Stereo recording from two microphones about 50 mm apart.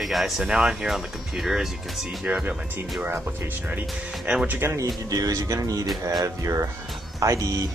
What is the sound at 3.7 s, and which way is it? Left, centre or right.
Speech, right.